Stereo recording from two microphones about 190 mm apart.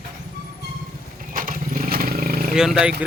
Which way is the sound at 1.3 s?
45° right (ahead or behind).